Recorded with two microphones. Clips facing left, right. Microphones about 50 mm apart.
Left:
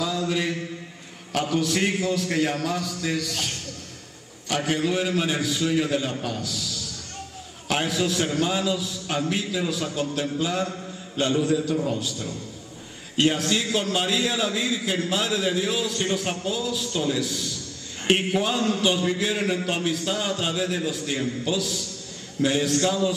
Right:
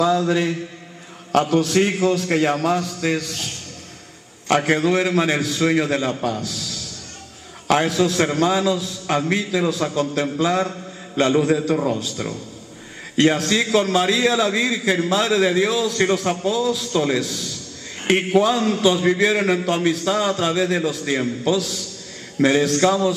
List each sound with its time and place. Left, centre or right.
0.0 s mantra: right
1.4 s a man's voice: right
4.5 s a man's voice: right